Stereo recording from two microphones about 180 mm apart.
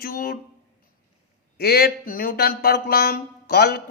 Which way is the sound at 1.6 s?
60° left (ahead or behind).